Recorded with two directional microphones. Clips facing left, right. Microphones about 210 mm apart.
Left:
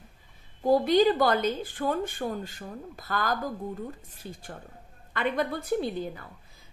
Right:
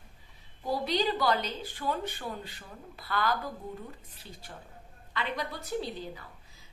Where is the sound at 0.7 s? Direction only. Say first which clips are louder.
Left 9 dB; 50° left (ahead or behind).